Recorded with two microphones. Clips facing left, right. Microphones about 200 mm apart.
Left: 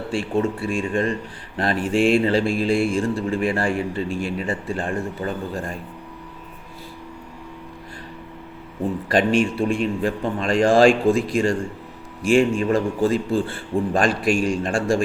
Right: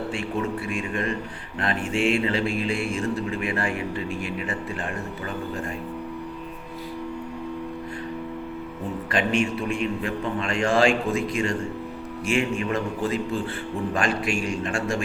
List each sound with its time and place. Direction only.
0.1 s a man's voice: 30° left (ahead or behind)
9.0 s speech: 35° left (ahead or behind)